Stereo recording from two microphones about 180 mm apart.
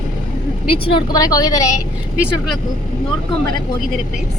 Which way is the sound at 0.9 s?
20° left (ahead or behind).